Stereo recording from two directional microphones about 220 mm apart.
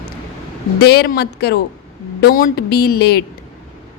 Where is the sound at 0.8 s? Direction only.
45° left (ahead or behind).